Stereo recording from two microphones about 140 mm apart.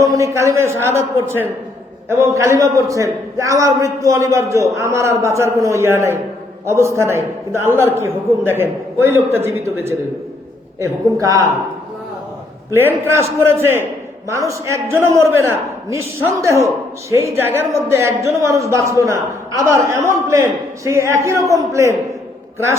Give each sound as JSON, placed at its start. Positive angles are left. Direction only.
{"t": 0.0, "sound": "a man's voice", "side_deg": -25}
{"t": 12.7, "sound": "a man's voice", "side_deg": -20}